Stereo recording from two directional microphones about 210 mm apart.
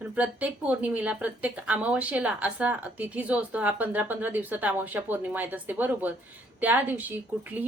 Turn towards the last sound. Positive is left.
turn(degrees=-10)  # may be behind; listen again after turning